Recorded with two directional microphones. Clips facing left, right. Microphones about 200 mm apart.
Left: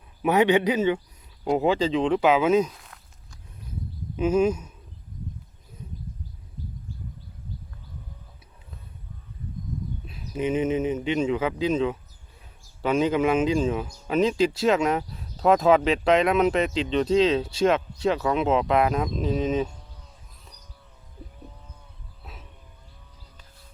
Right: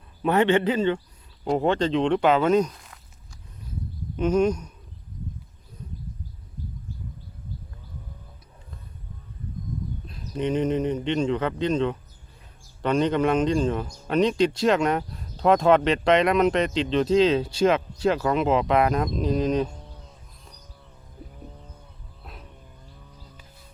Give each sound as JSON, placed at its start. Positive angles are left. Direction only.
{"t": 0.2, "sound": "a man's voice", "side_deg": 10}
{"t": 4.2, "sound": "speech", "side_deg": 5}
{"t": 10.1, "sound": "speech", "side_deg": 5}
{"t": 22.2, "sound": "music", "side_deg": 0}